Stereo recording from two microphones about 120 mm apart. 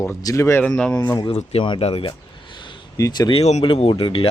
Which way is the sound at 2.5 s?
40° left (ahead or behind).